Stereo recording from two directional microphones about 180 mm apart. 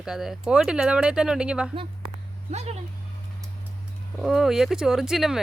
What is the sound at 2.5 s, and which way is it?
Speech, 35° right (ahead or behind).